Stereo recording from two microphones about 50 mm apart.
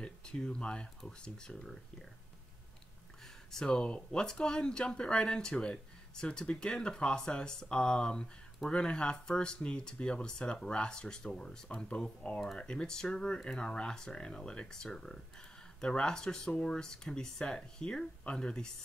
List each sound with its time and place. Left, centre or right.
0.5 s speech: centre
3.5 s speech: centre